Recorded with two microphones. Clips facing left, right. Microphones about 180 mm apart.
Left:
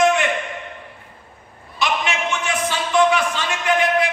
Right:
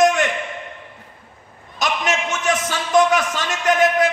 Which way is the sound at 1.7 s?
40° right (ahead or behind).